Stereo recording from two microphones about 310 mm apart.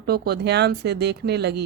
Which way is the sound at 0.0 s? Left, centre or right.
Right.